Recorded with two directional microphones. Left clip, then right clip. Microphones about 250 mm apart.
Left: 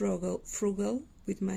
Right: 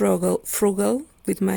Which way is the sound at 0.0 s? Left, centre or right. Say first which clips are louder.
Right 12 dB; right.